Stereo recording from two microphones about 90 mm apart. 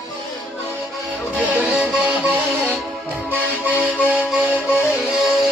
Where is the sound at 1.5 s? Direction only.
15° right (ahead or behind).